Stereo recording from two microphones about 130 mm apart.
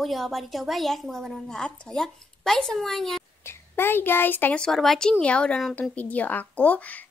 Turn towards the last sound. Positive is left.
turn(degrees=10)  # may be behind; listen again after turning